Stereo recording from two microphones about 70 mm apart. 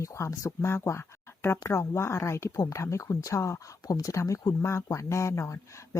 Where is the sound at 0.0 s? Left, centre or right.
Left.